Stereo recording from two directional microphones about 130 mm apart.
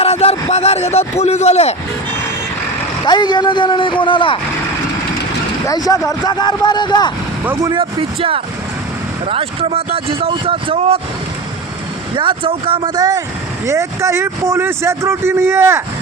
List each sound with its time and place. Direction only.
0.0 s a sound: 50° left (ahead or behind)
1.2 s speech: 60° left (ahead or behind)
3.1 s speech: 35° left (ahead or behind)
5.6 s speech: 30° left (ahead or behind)
7.7 s speech: 40° right (ahead or behind)
12.1 s speech: 40° right (ahead or behind); by 15.8 s 20° right (ahead or behind)